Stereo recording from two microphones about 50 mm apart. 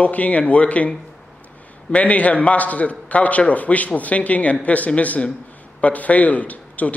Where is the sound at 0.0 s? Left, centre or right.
Left.